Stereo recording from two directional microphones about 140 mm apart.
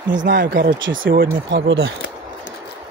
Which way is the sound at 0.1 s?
80° right.